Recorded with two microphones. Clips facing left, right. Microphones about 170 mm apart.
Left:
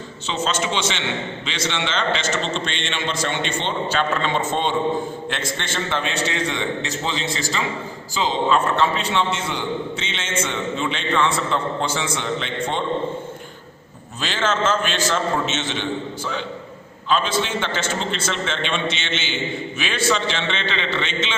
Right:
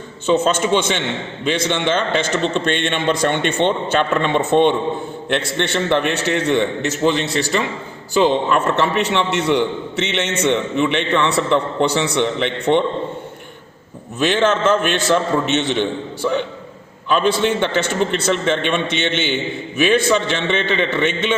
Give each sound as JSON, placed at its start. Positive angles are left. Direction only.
{"t": 0.3, "sound": "a man's voice", "side_deg": -55}
{"t": 14.5, "sound": "a man's voice", "side_deg": -60}
{"t": 17.2, "sound": "a man's voice", "side_deg": -60}